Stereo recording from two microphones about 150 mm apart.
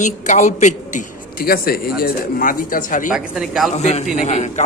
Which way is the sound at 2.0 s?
70° left (ahead or behind).